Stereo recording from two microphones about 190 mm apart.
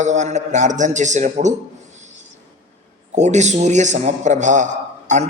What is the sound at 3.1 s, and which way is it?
A man's voice, 40° right (ahead or behind).